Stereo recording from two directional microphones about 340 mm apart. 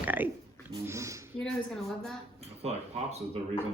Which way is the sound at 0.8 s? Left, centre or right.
Centre.